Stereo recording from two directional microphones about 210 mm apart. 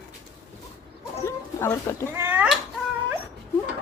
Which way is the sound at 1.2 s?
15° left (ahead or behind).